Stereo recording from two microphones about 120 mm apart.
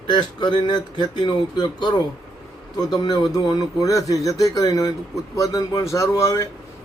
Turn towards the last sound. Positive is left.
turn(degrees=25)  # may be behind; listen again after turning